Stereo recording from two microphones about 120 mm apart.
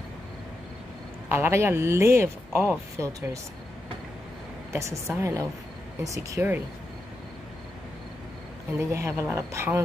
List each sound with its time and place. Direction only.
1.3 s speech: 20° right (ahead or behind)
4.7 s speech: 25° right (ahead or behind)
8.7 s speech: 20° right (ahead or behind)